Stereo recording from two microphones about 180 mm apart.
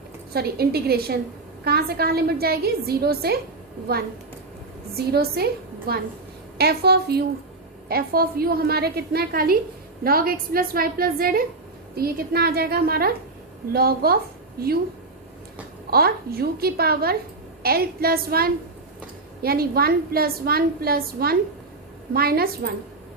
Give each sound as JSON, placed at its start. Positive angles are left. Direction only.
{"t": 0.3, "sound": "a woman's voice", "side_deg": -60}
{"t": 4.9, "sound": "a woman's voice", "side_deg": -60}
{"t": 15.9, "sound": "a woman's voice", "side_deg": -60}